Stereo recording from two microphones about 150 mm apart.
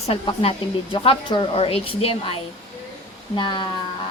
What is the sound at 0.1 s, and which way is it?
A woman's voice, 40° left (ahead or behind).